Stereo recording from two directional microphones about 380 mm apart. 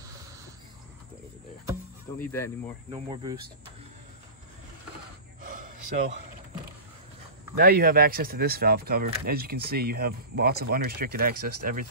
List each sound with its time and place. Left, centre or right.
2.1 s speech: centre
2.9 s speech: centre
5.4 s gasp: right
7.5 s speech: right